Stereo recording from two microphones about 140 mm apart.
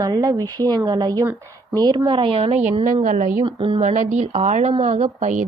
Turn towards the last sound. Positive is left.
turn(degrees=-60)  # may be behind; listen again after turning